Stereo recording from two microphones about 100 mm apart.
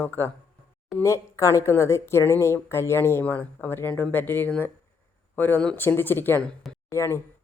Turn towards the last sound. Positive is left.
turn(degrees=25)  # may be behind; listen again after turning